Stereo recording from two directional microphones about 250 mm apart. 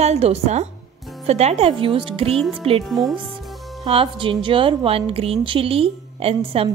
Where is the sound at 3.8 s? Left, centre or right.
Right.